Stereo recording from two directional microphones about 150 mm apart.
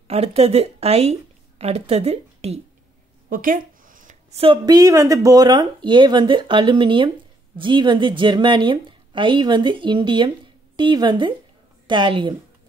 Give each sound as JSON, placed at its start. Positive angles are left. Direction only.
{"t": 0.1, "sound": "a woman's voice", "side_deg": -40}
{"t": 3.3, "sound": "a sound", "side_deg": -65}
{"t": 4.4, "sound": "a woman's voice", "side_deg": -30}